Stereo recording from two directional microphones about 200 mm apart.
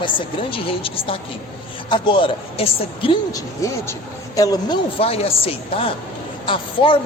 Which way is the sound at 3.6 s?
15° left (ahead or behind).